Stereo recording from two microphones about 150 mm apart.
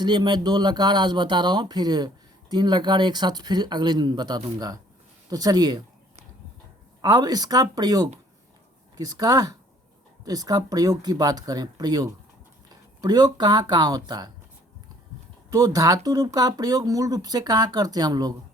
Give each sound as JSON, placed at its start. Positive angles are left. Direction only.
{"t": 0.0, "sound": "speech", "side_deg": -30}
{"t": 7.0, "sound": "speech", "side_deg": -25}
{"t": 15.5, "sound": "speech", "side_deg": -25}